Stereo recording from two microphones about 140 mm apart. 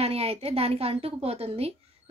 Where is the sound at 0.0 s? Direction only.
45° right (ahead or behind).